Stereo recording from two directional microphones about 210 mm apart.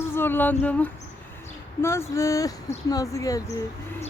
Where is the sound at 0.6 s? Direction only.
5° left (ahead or behind).